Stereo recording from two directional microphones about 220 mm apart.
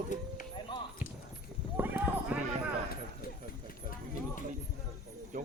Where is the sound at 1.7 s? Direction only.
10° right (ahead or behind).